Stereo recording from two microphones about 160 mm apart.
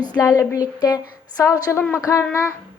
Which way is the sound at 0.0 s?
25° left (ahead or behind).